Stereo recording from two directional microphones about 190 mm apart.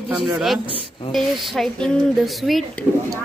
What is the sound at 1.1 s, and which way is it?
Speech, centre (ahead or behind).